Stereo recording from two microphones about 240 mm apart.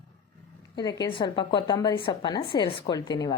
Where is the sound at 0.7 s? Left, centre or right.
Centre.